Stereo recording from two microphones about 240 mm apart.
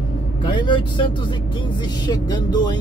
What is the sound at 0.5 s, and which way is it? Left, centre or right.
Speech, centre.